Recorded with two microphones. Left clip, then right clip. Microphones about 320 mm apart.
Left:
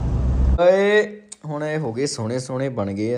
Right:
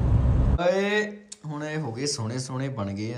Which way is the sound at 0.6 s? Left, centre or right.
Centre.